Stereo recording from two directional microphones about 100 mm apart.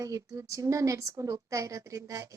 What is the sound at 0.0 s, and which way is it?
A woman's voice, 35° right (ahead or behind).